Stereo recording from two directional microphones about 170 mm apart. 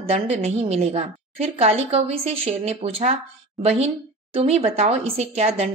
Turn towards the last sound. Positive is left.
turn(degrees=-35)  # may be behind; listen again after turning